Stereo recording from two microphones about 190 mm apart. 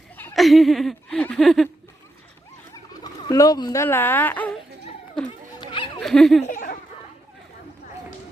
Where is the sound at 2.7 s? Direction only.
20° left (ahead or behind).